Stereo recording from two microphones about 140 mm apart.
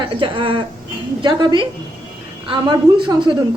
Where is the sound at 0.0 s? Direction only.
35° right (ahead or behind).